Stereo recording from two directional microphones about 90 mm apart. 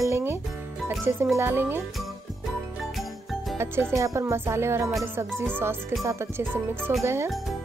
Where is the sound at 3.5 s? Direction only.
25° right (ahead or behind).